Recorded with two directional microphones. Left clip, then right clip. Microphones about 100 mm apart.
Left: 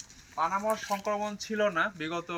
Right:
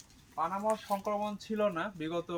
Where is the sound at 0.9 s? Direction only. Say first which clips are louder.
Left 2 dB; 30° right (ahead or behind).